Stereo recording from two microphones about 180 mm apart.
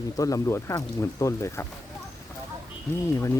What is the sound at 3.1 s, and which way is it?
Speech, 15° left (ahead or behind).